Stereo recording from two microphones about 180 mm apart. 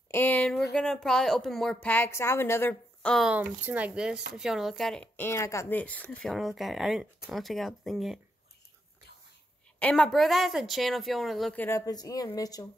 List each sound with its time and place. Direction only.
0.1 s speech: 10° left (ahead or behind)
9.8 s speech: 5° left (ahead or behind)
11.6 s speech: 20° left (ahead or behind)